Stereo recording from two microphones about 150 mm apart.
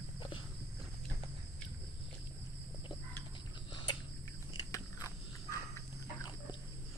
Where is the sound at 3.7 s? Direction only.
35° left (ahead or behind).